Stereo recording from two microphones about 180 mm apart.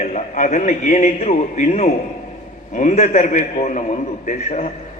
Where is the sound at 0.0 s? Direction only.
45° left (ahead or behind).